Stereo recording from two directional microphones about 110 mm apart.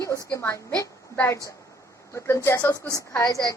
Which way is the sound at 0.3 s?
25° left (ahead or behind).